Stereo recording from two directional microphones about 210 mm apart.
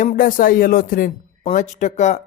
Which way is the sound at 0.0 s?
40° left (ahead or behind).